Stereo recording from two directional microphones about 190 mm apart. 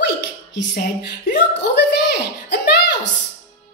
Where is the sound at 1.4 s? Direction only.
65° left (ahead or behind).